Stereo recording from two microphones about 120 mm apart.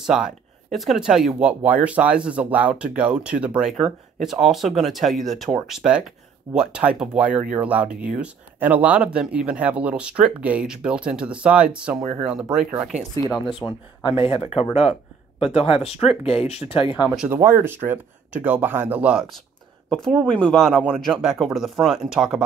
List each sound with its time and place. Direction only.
0.0 s speech: 5° right (ahead or behind)
13.5 s speech: 45° left (ahead or behind)
17.3 s speech: 20° right (ahead or behind); by 22.4 s 5° right (ahead or behind)